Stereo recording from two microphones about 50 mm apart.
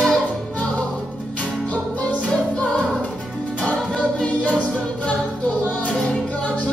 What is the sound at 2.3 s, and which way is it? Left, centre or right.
Music, centre.